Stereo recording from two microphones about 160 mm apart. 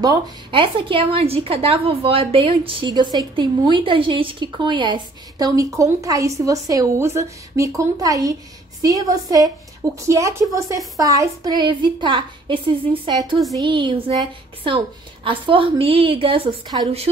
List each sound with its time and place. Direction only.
0.0 s a woman's voice: 30° right (ahead or behind)
15.2 s a woman's voice: 30° right (ahead or behind)